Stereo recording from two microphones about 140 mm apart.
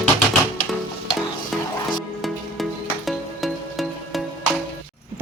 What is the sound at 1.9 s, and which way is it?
Music, centre (ahead or behind).